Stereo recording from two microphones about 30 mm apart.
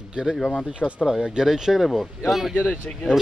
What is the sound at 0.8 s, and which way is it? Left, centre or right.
Speech, left.